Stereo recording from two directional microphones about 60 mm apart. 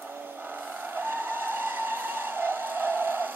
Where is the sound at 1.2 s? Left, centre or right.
Right.